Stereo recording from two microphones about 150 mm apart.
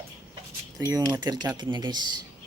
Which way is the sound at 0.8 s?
20° right (ahead or behind).